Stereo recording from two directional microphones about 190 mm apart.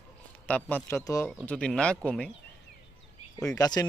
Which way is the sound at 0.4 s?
10° left (ahead or behind).